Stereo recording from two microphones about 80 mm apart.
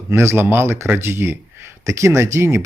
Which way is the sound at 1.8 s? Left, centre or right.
Right.